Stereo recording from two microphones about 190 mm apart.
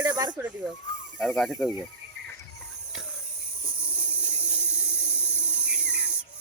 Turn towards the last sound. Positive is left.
turn(degrees=-5)  # may be behind; listen again after turning